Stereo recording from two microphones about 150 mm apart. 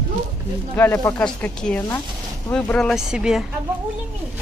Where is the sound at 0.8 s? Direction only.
15° left (ahead or behind); by 3.5 s 5° right (ahead or behind).